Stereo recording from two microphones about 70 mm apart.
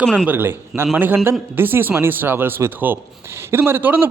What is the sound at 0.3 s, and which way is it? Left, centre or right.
A man's voice, right.